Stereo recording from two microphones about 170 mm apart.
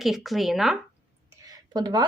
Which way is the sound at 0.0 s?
Centre (ahead or behind).